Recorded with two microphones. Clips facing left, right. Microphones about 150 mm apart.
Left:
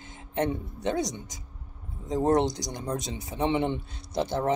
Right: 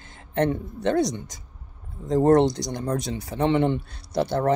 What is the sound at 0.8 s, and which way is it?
Speech, 65° right (ahead or behind).